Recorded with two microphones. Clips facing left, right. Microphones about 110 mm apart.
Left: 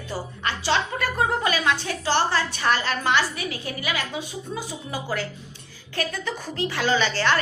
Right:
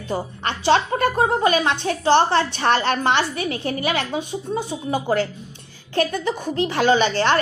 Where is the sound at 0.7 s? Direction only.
50° right (ahead or behind).